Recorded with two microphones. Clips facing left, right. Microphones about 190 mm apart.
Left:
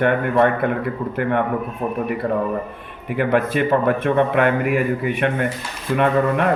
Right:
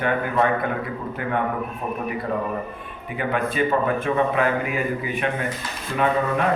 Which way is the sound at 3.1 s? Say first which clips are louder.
Left 6 dB; 65° left (ahead or behind).